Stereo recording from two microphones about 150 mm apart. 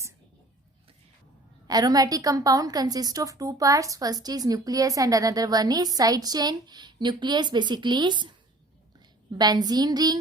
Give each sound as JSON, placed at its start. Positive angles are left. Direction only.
{"t": 1.6, "sound": "a woman's voice", "side_deg": -25}
{"t": 9.4, "sound": "a woman's voice", "side_deg": -25}